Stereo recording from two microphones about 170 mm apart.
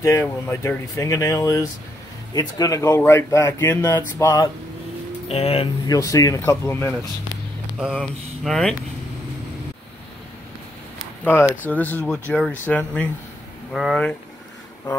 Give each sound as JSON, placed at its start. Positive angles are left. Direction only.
{"t": 0.0, "sound": "speech", "side_deg": 15}
{"t": 5.3, "sound": "speech", "side_deg": 35}
{"t": 5.9, "sound": "speech", "side_deg": 20}
{"t": 7.8, "sound": "speech", "side_deg": 0}
{"t": 11.2, "sound": "speech", "side_deg": 15}